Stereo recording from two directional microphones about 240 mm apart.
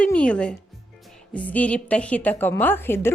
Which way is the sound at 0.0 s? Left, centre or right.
Centre.